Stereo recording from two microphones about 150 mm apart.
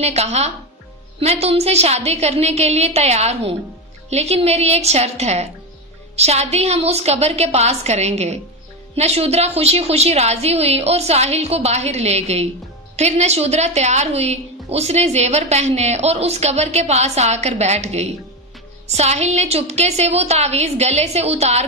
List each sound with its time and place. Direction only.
0.0 s a woman's voice: 45° right (ahead or behind)